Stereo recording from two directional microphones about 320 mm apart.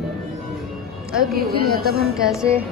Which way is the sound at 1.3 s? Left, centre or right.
Right.